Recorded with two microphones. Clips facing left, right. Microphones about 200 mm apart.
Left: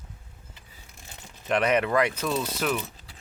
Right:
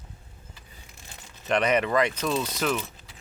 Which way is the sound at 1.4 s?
5° left (ahead or behind).